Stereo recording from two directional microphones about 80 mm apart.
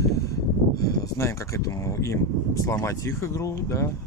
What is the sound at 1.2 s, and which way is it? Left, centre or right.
Speech, left.